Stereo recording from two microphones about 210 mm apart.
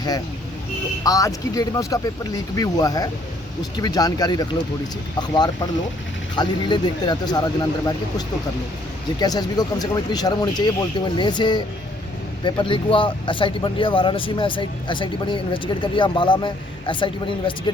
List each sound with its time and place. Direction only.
1.0 s speech: 15° left (ahead or behind)
6.3 s speech: 20° left (ahead or behind)
9.1 s speech: 20° left (ahead or behind)